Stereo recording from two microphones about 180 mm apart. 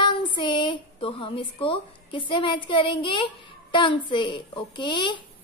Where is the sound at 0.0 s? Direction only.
25° left (ahead or behind).